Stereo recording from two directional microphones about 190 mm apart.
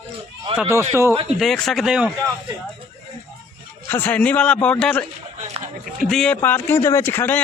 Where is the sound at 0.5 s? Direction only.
5° right (ahead or behind).